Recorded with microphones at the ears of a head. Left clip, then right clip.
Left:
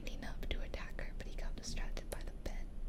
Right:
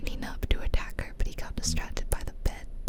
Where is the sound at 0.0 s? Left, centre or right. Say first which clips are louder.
Right 10 dB; right.